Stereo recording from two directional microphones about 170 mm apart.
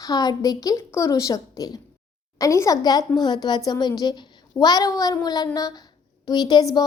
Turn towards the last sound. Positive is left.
turn(degrees=25)  # may be behind; listen again after turning